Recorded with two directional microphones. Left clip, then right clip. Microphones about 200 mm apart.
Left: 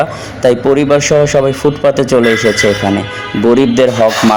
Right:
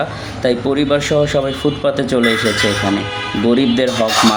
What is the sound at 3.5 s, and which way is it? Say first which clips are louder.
Speech: left 7 dB; 30° left (ahead or behind).